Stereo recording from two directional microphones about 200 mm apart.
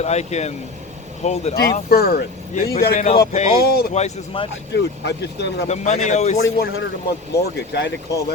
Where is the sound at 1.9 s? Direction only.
50° left (ahead or behind); by 3.2 s 30° left (ahead or behind).